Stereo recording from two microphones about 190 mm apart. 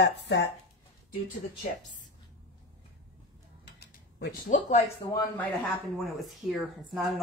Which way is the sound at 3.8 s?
60° left (ahead or behind).